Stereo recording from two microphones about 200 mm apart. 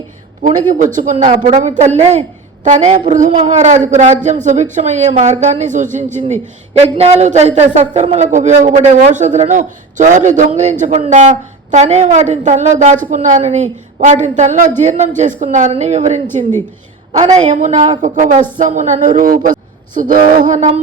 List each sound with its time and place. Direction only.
0.4 s a woman's voice: 40° right (ahead or behind)
17.3 s a woman's voice: 35° right (ahead or behind)